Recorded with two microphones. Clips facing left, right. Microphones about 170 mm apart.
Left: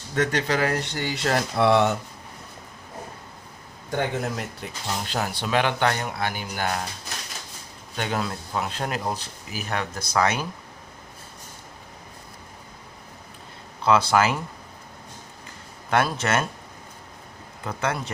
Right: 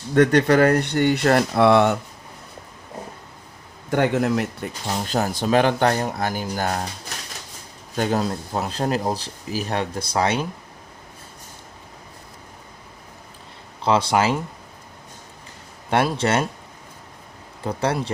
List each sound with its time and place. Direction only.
0.1 s speech: 55° right (ahead or behind)
3.9 s speech: 70° right (ahead or behind)
5.0 s speech: 45° right (ahead or behind)
7.9 s speech: 40° right (ahead or behind)
13.8 s speech: 25° right (ahead or behind)
15.9 s speech: 30° right (ahead or behind)
17.6 s speech: 30° right (ahead or behind)